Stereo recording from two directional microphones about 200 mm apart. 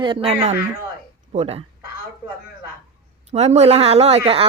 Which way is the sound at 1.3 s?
30° right (ahead or behind).